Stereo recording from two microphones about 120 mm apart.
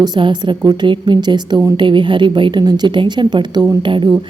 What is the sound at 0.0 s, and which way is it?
A woman's voice, 40° right (ahead or behind).